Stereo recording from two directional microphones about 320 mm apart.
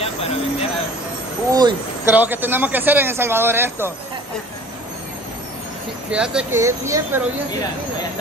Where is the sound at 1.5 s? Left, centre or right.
Centre.